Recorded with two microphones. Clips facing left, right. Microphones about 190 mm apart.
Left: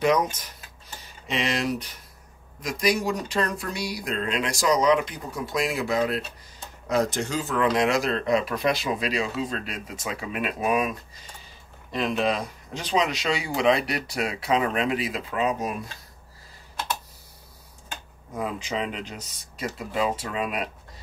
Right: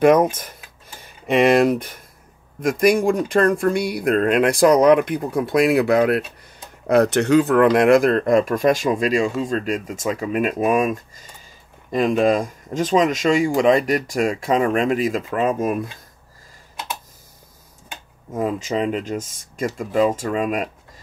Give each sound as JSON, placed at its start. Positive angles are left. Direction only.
{"t": 0.0, "sound": "speech", "side_deg": -55}
{"t": 18.3, "sound": "speech", "side_deg": -45}